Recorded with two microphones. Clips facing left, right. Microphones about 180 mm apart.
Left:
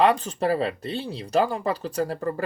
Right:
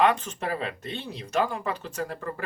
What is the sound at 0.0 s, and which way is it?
Speech, 35° left (ahead or behind).